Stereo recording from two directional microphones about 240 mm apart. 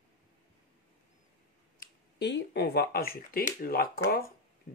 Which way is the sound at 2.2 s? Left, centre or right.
Left.